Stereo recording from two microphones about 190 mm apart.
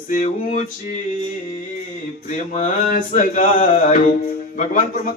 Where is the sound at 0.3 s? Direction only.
35° left (ahead or behind).